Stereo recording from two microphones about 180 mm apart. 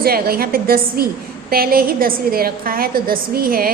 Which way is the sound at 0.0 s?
55° right (ahead or behind).